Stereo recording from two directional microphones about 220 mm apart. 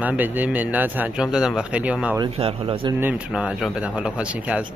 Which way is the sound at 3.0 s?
5° right (ahead or behind).